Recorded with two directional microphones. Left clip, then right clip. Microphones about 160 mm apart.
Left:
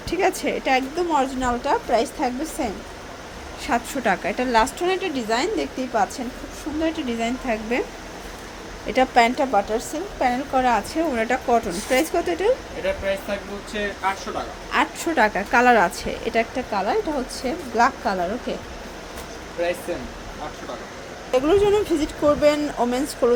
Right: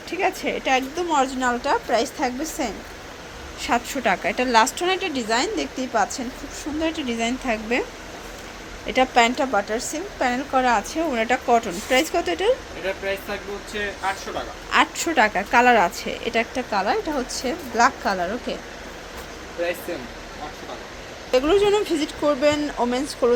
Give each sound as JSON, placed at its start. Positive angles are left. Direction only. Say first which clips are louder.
{"t": 0.1, "sound": "a woman's voice", "louder": "left 2 dB", "side_deg": 20}
{"t": 0.5, "sound": "a woman's voice", "louder": "left 1 dB", "side_deg": 10}
{"t": 8.9, "sound": "a woman's voice", "louder": "even", "side_deg": 5}
{"t": 14.0, "sound": "a woman's voice", "louder": "left 1 dB", "side_deg": -5}
{"t": 21.3, "sound": "a woman's voice", "louder": "even", "side_deg": 0}